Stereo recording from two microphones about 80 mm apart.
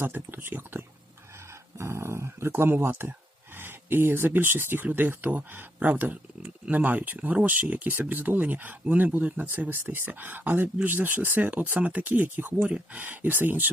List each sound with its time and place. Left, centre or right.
0.0 s speech: right
3.6 s a sound: right
4.3 s speech: right